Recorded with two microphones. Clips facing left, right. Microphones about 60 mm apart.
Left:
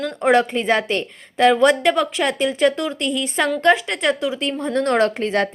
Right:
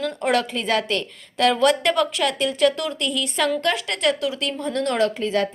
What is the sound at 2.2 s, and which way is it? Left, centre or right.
A woman's voice, left.